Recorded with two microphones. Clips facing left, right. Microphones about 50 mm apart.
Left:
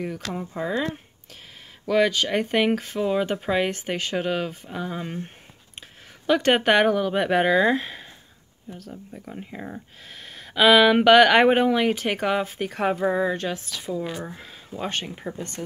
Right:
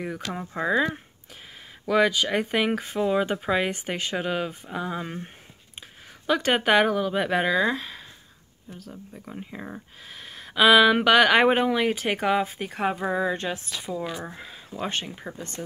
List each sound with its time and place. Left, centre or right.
0.0 s speech: centre
5.8 s a sound: centre
7.2 s speech: centre
8.6 s speech: centre
13.4 s speech: right
14.2 s speech: centre